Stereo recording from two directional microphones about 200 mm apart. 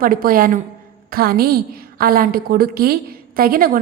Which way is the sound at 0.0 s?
45° right (ahead or behind).